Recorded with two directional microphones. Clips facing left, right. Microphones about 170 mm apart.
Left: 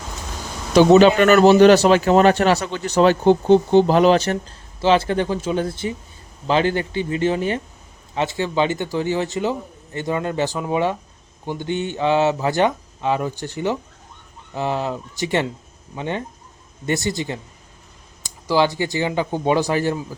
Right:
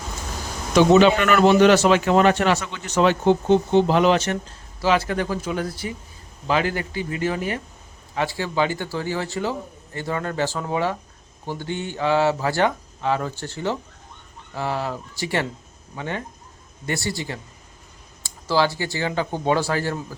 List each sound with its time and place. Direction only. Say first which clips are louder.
0.7 s a man's voice: left 3 dB; 35° left (ahead or behind); by 20.1 s 20° left (ahead or behind)